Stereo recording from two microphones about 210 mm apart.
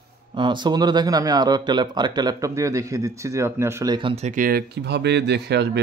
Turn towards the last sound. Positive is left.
turn(degrees=-50)  # may be behind; listen again after turning